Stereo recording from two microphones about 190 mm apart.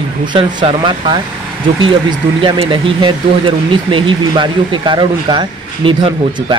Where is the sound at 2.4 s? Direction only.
25° right (ahead or behind).